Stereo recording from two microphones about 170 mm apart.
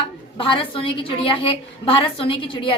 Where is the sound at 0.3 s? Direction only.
30° left (ahead or behind).